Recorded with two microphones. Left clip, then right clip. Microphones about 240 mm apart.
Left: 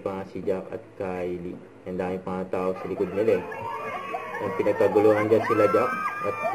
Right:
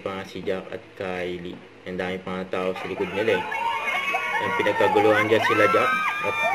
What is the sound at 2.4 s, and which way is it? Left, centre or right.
Speech, right.